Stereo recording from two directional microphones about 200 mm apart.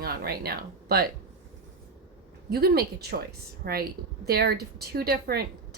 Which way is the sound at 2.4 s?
50° right (ahead or behind).